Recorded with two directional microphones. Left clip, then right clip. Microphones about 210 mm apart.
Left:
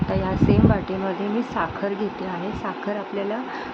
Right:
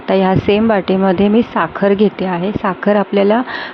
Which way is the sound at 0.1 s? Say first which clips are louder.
Right 11 dB; 30° right (ahead or behind).